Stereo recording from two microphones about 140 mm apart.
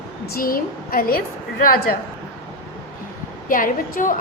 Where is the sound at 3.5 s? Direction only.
85° left.